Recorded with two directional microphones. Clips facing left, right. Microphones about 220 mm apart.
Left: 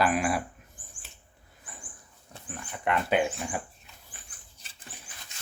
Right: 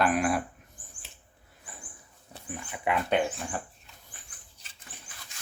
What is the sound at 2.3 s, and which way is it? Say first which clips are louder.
Speech: right 2 dB; 5° right (ahead or behind).